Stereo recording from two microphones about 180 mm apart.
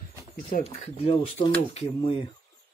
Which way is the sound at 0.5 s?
45° left (ahead or behind).